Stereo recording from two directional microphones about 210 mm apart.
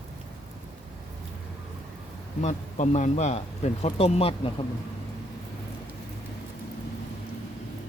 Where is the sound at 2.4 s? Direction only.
35° left (ahead or behind).